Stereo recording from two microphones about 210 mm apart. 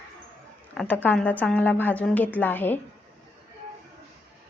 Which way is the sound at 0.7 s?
Centre (ahead or behind).